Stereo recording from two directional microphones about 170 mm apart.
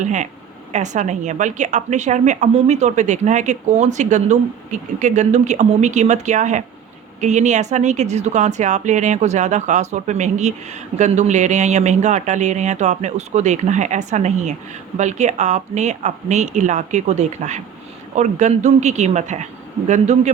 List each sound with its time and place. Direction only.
0.0 s speech: 45° right (ahead or behind)